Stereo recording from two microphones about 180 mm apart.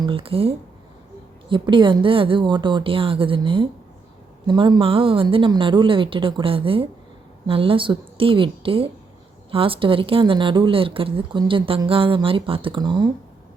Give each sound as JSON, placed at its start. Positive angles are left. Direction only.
{"t": 0.0, "sound": "a woman's voice", "side_deg": -30}